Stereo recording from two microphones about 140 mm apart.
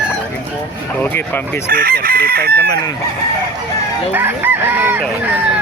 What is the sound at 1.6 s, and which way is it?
Chicken, 90° right.